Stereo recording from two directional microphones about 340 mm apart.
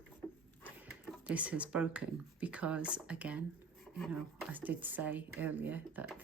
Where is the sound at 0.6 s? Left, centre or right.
Centre.